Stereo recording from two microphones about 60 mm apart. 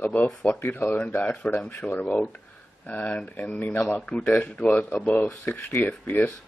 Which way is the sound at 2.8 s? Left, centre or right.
Left.